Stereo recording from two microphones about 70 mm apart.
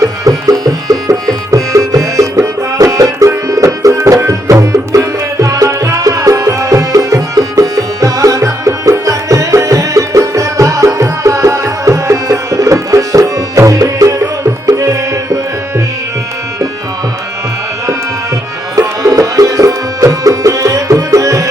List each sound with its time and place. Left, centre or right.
0.0 s music: right
18.8 s music: right